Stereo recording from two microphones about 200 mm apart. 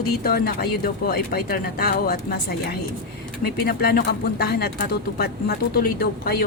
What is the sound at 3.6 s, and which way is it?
Speech, 50° left (ahead or behind).